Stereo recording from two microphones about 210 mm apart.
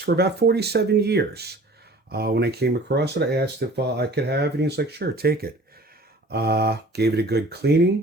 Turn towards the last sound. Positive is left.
turn(degrees=-50)  # may be behind; listen again after turning